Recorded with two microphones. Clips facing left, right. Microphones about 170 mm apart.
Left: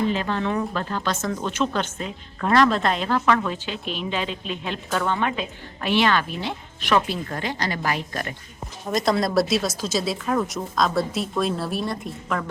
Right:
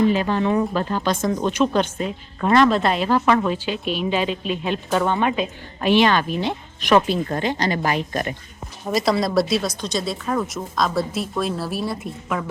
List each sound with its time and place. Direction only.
0.1 s speech: 15° right (ahead or behind)
2.5 s speech: centre (ahead or behind)
3.2 s a woman's voice: 20° right (ahead or behind)
8.9 s speech: 5° right (ahead or behind)